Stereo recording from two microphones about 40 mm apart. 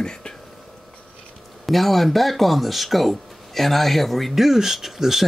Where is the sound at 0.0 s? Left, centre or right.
Centre.